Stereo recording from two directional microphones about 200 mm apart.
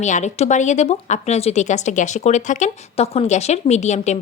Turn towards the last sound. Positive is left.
turn(degrees=35)  # may be behind; listen again after turning